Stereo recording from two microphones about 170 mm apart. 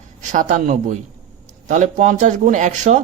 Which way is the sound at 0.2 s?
45° right (ahead or behind).